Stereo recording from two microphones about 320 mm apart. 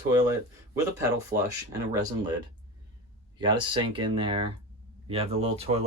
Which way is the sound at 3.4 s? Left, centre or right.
Centre.